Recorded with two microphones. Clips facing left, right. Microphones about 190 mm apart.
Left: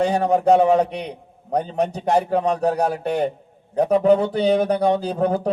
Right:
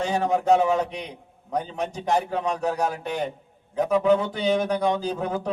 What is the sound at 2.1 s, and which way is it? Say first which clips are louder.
Speech: left 6 dB; 35° left (ahead or behind).